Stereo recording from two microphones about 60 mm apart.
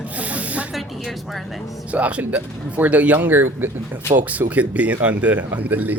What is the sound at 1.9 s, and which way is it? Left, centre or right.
Speech, right.